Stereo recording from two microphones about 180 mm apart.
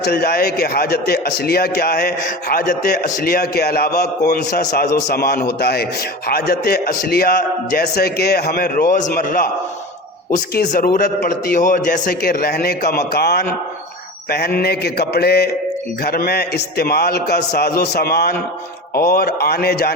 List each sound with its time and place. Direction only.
0.0 s a man's voice: 60° left (ahead or behind)
10.7 s a man's voice: 50° left (ahead or behind)